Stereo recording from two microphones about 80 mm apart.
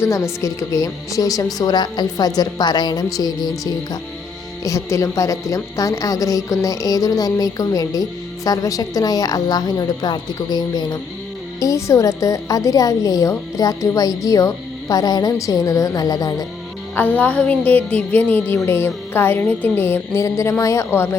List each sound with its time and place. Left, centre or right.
0.0 s a woman's voice: left
4.6 s a woman's voice: left
11.6 s a woman's voice: left
16.9 s music: left
20.2 s a woman's voice: left